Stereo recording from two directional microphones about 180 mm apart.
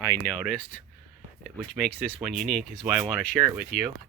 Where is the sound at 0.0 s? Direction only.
10° left (ahead or behind).